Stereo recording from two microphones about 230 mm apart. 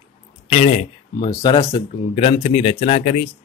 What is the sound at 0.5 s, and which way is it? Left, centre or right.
Speech, left.